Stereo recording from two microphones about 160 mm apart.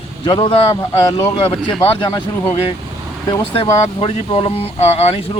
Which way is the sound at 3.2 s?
30° left (ahead or behind).